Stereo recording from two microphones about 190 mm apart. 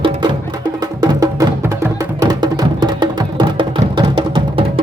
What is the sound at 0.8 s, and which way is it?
Music, 20° right (ahead or behind).